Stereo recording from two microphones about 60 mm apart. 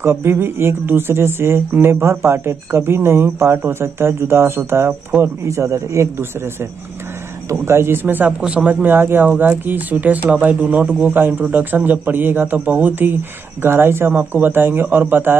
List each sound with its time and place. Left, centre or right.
0.0 s speech: right
8.3 s speech: centre
8.6 s a man's voice: right
11.1 s a man's voice: right